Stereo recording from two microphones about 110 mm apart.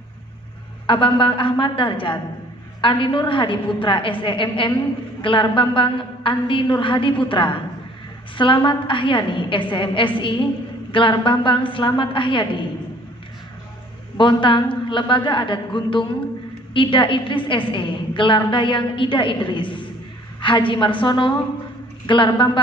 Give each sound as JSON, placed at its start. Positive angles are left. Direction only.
{"t": 0.8, "sound": "a woman's voice", "side_deg": 50}
{"t": 14.1, "sound": "a woman's voice", "side_deg": 50}